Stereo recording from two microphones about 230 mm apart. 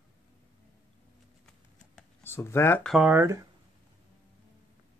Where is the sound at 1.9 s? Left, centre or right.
Centre.